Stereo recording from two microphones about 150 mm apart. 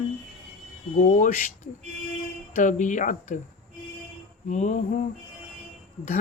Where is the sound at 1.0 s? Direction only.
60° left (ahead or behind).